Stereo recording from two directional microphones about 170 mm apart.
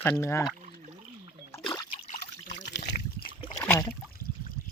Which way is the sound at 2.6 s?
90° left.